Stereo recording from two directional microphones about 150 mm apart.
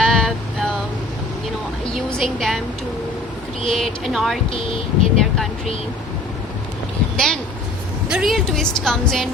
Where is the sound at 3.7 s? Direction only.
Centre (ahead or behind).